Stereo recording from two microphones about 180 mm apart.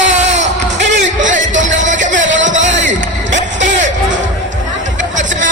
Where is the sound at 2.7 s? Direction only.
90° right.